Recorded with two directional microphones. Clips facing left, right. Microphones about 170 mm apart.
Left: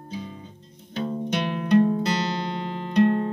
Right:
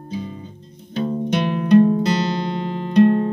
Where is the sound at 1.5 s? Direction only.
20° right (ahead or behind).